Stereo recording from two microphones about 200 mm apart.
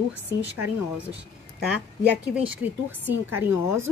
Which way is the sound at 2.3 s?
5° right (ahead or behind).